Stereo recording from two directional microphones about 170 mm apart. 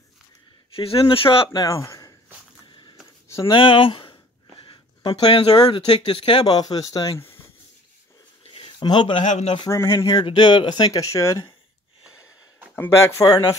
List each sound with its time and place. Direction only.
0.7 s speech: 35° left (ahead or behind)
3.4 s speech: 30° left (ahead or behind)
8.5 s speech: 30° left (ahead or behind)
9.7 s speech: 15° left (ahead or behind)
12.7 s speech: 15° left (ahead or behind)